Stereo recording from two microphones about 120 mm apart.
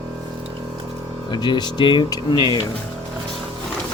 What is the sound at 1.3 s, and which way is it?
Speech, 40° left (ahead or behind).